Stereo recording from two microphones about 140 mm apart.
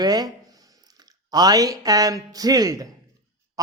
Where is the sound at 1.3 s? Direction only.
25° right (ahead or behind).